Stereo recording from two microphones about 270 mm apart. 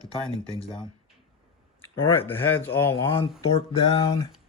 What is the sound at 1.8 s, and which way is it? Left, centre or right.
Speech, centre.